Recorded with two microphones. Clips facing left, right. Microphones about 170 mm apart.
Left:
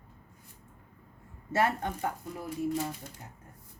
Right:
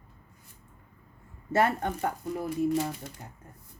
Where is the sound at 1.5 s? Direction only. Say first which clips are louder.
Right 3 dB; 55° right (ahead or behind).